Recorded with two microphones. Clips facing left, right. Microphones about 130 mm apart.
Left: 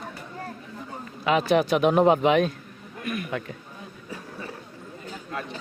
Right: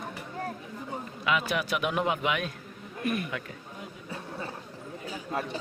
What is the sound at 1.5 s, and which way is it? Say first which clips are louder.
Speech: left 9 dB; 30° left (ahead or behind).